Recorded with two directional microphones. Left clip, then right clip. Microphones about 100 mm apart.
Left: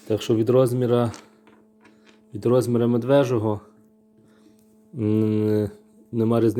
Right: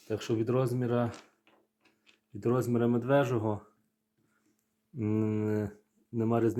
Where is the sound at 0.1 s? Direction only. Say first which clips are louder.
Left 11 dB; 80° left.